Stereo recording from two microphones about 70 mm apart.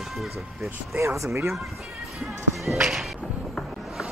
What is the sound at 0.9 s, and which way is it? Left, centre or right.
Speech, right.